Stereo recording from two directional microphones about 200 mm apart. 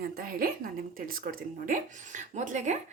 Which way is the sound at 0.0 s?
50° right (ahead or behind).